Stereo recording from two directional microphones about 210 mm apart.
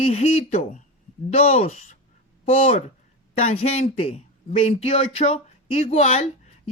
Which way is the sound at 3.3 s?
30° left (ahead or behind).